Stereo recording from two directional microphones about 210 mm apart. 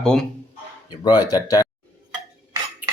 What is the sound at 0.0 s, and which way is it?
Speech, 5° left (ahead or behind).